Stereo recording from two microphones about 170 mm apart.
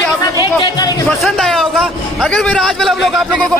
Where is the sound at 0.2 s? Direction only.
25° left (ahead or behind).